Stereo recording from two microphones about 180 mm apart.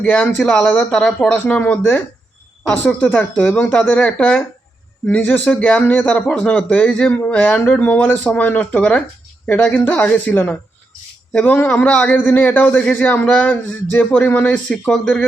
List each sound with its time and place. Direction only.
0.0 s a man's voice: 5° left (ahead or behind)